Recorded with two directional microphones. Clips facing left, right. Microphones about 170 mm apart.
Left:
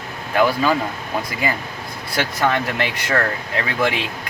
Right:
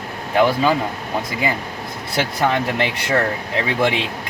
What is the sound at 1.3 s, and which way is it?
Speech, 20° right (ahead or behind).